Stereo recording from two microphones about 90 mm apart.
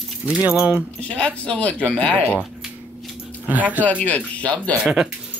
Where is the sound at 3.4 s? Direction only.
20° right (ahead or behind).